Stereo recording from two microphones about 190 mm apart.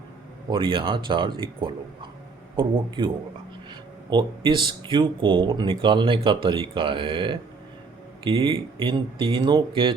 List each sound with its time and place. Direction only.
0.5 s speech: 25° right (ahead or behind)
4.1 s speech: 25° right (ahead or behind)